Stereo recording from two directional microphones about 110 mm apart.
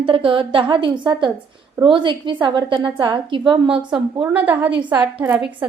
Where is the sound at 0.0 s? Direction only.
55° right (ahead or behind).